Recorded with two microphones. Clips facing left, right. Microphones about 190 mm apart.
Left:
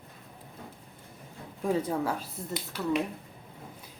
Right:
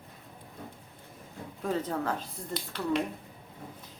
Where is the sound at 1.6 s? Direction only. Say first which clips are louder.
Left 3 dB; 10° left (ahead or behind).